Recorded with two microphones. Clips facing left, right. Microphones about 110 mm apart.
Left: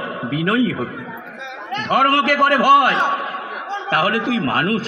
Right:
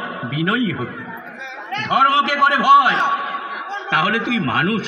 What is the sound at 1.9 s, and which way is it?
A man's voice, 55° left (ahead or behind).